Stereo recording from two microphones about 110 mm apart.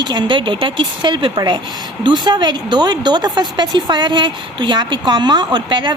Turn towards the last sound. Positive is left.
turn(degrees=-40)  # may be behind; listen again after turning